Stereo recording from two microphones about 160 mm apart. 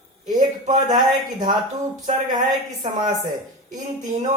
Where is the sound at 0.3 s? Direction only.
50° right (ahead or behind).